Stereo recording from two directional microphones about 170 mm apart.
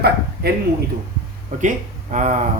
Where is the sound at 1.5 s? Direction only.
50° right (ahead or behind).